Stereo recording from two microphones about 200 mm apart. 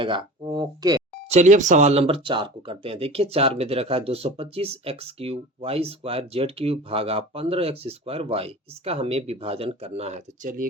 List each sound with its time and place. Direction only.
0.0 s speech: 25° right (ahead or behind)
1.3 s speech: 35° right (ahead or behind)